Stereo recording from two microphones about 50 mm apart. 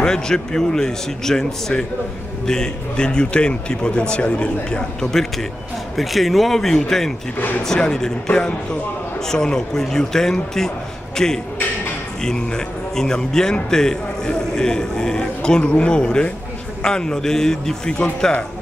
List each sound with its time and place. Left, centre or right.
0.0 s a man's voice: centre
5.9 s a man's voice: centre